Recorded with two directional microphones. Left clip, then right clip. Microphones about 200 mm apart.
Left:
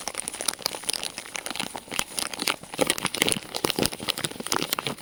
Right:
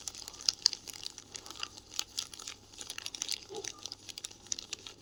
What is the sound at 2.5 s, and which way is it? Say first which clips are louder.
Crumpling: left 19 dB; 45° left (ahead or behind).